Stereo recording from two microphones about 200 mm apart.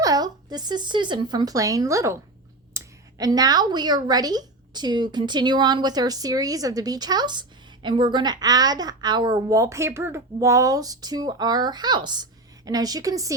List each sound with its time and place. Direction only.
0.0 s speech: 20° right (ahead or behind)